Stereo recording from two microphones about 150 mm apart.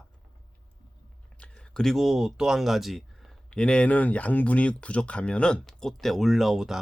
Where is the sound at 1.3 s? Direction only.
5° left (ahead or behind).